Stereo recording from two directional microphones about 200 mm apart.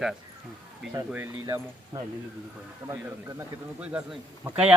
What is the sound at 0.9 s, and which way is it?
A man's voice, 15° right (ahead or behind).